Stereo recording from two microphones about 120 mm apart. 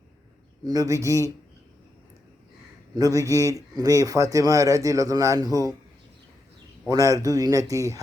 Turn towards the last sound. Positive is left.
turn(degrees=-25)  # may be behind; listen again after turning